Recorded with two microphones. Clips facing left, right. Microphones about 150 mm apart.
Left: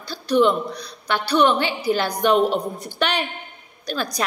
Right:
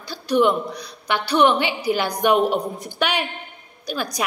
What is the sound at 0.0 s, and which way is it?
A woman's voice, 15° right (ahead or behind).